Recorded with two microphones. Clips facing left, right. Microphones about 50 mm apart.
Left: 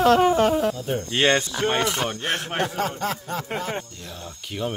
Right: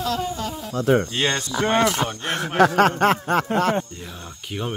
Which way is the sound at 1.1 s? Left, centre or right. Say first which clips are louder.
Left 3 dB; left.